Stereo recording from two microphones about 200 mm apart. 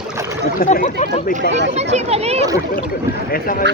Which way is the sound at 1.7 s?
30° right (ahead or behind).